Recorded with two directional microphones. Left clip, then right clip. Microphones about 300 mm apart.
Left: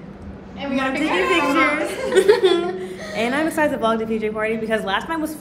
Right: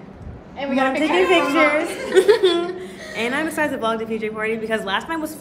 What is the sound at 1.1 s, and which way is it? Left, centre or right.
A woman's voice, right.